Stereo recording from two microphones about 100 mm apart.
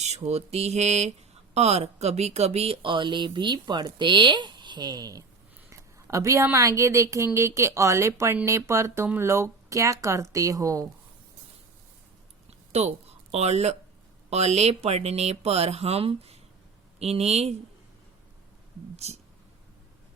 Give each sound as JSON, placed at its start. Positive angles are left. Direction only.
{"t": 0.0, "sound": "speech", "side_deg": -90}
{"t": 12.7, "sound": "speech", "side_deg": -90}
{"t": 19.0, "sound": "speech", "side_deg": -90}